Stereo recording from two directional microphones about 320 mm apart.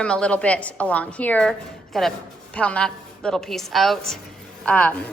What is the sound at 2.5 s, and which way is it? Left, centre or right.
A woman's voice, centre.